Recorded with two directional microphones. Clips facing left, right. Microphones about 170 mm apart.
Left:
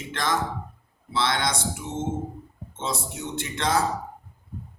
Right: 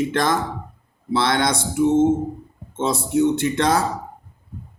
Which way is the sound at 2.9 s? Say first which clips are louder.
Right 16 dB; 40° right (ahead or behind).